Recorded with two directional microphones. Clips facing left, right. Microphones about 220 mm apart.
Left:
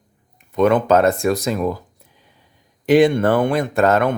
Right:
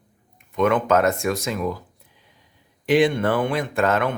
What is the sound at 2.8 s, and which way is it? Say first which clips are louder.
Speech: left 5 dB; 45° left (ahead or behind).